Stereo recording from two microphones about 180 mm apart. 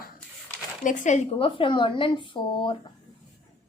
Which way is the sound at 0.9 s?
45° left (ahead or behind).